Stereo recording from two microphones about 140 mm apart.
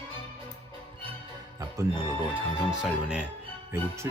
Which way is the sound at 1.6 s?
20° right (ahead or behind).